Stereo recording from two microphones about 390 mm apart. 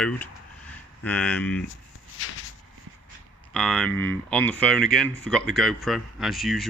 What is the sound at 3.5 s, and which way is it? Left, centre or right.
Speech, centre.